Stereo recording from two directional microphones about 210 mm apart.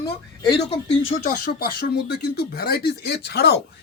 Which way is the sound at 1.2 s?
45° left (ahead or behind).